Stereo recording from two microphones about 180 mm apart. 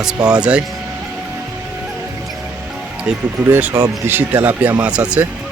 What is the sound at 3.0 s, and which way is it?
Speech, 10° right (ahead or behind).